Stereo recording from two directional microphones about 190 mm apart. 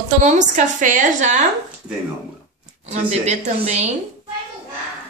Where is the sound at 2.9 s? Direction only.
35° right (ahead or behind).